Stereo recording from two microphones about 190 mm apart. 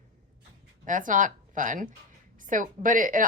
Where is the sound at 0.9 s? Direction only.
45° right (ahead or behind).